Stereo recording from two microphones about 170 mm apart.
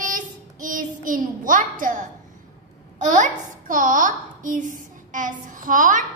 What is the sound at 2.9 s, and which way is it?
A child's voice, 50° right (ahead or behind).